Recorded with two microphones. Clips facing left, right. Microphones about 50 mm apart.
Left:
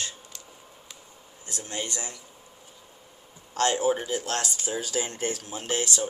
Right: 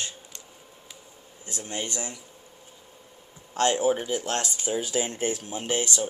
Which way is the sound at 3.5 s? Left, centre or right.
Right.